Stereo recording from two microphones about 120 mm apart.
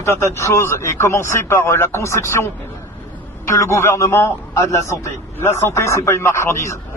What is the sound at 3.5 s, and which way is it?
A man's voice, 25° left (ahead or behind).